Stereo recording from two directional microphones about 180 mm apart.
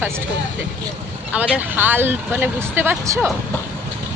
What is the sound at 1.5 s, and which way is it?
Speech, 10° right (ahead or behind).